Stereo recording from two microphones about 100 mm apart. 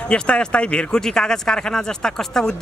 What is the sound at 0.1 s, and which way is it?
Speech, 10° left (ahead or behind).